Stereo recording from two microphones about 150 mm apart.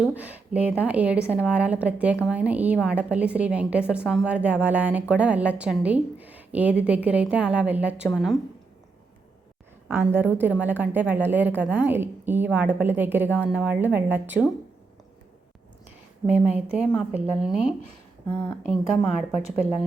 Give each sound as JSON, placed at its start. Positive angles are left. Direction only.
{"t": 0.0, "sound": "a woman's voice", "side_deg": -10}
{"t": 9.9, "sound": "a woman's voice", "side_deg": -15}
{"t": 16.2, "sound": "a woman's voice", "side_deg": -10}
{"t": 18.3, "sound": "speech", "side_deg": 15}